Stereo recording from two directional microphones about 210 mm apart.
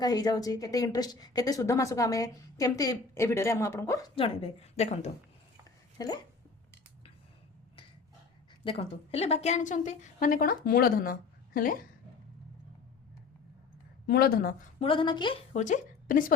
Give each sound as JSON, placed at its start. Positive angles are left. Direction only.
{"t": 0.0, "sound": "speech", "side_deg": 20}
{"t": 8.6, "sound": "a woman's voice", "side_deg": 25}
{"t": 14.1, "sound": "a woman's voice", "side_deg": 45}
{"t": 14.8, "sound": "a woman's voice", "side_deg": 25}
{"t": 15.5, "sound": "a woman's voice", "side_deg": 35}